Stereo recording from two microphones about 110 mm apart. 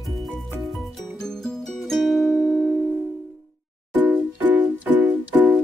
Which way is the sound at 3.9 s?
15° right (ahead or behind).